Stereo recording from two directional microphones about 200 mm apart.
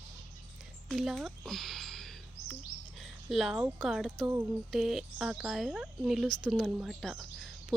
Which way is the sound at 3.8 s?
Centre (ahead or behind).